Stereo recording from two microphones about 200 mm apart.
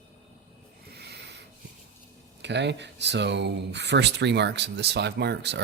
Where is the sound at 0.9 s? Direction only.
55° right (ahead or behind).